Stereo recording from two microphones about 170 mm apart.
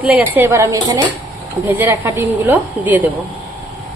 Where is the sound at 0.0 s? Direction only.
10° right (ahead or behind).